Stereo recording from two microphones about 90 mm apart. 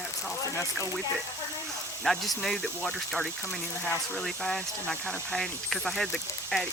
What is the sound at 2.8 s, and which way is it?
Speech, 15° left (ahead or behind).